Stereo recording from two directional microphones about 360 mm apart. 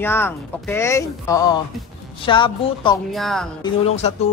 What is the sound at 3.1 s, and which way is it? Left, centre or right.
Speech, centre.